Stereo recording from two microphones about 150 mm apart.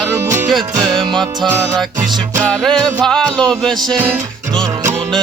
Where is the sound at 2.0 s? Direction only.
25° right (ahead or behind).